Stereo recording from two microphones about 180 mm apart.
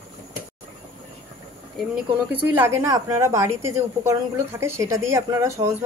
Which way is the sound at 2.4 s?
15° right (ahead or behind).